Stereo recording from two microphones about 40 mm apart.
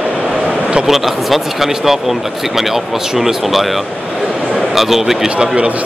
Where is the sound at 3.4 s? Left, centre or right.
Centre.